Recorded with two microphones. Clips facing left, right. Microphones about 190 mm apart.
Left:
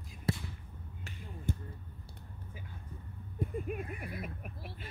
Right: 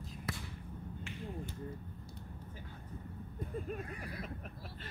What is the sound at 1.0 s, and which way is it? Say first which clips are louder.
Finger snapping: right 4 dB; 40° left (ahead or behind).